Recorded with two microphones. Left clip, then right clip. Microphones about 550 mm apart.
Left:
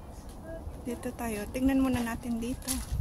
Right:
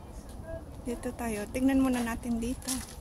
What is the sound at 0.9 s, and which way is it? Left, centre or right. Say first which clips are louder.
A woman's voice: right 1 dB; left.